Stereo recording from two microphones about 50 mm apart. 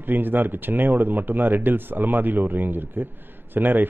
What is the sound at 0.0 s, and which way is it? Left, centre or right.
A man's voice, right.